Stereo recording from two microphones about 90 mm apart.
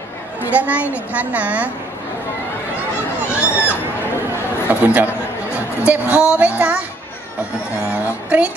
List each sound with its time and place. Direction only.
0.5 s a woman's voice: 15° right (ahead or behind)
3.3 s a sound: 15° right (ahead or behind)
4.6 s a woman's voice: 15° right (ahead or behind)
7.9 s a woman's voice: 15° right (ahead or behind)